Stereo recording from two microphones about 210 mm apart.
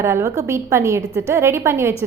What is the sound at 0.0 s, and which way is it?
A woman's voice, 15° right (ahead or behind).